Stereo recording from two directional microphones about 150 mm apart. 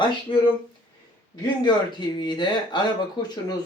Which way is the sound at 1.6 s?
30° left (ahead or behind).